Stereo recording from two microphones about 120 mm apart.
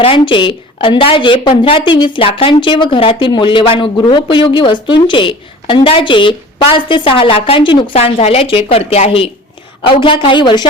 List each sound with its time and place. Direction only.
0.0 s a woman's voice: 45° left (ahead or behind)